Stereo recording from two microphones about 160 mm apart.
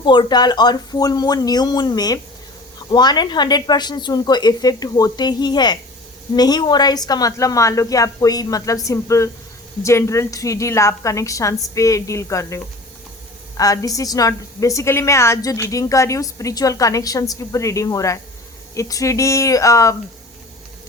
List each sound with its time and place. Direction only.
0.0 s a woman's voice: 30° left (ahead or behind)